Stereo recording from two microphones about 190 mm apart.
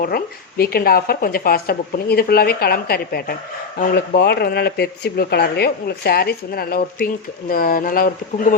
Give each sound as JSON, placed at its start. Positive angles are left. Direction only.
{"t": 0.0, "sound": "speech", "side_deg": 50}